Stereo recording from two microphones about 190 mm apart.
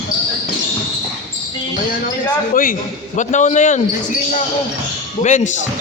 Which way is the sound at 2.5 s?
45° left (ahead or behind).